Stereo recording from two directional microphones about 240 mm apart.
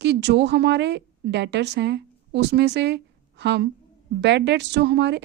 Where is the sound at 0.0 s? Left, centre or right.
Right.